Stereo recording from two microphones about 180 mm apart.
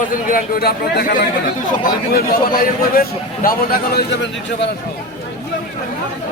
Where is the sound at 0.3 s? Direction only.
55° left (ahead or behind).